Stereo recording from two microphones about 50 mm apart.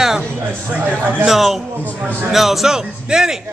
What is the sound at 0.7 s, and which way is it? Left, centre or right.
Speech, right.